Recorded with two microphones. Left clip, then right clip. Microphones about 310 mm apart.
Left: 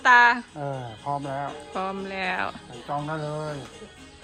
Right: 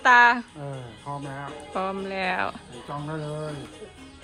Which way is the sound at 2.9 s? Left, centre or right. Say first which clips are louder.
Left 5 dB; centre.